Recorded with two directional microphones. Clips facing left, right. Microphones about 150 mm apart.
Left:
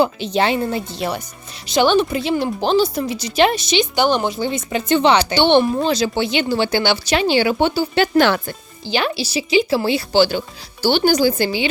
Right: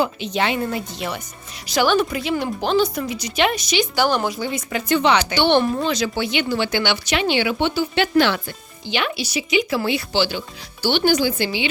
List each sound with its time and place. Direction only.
0.0 s a woman's voice: 35° left (ahead or behind)
1.6 s a woman's voice: 25° left (ahead or behind); by 11.7 s 40° left (ahead or behind)